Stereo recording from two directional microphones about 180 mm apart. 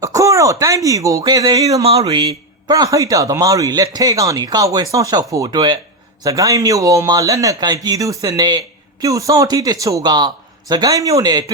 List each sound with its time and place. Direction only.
0.0 s speech: 20° right (ahead or behind)
1.8 s speech: 35° right (ahead or behind)